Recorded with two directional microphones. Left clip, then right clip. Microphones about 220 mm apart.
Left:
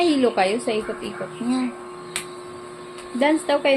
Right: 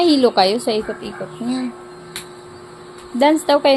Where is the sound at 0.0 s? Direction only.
35° right (ahead or behind).